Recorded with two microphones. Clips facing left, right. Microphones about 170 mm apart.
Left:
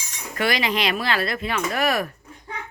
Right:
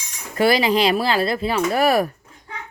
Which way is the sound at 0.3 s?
35° right (ahead or behind).